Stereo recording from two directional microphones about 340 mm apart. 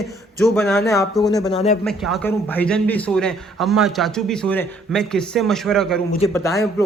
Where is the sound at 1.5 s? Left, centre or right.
Centre.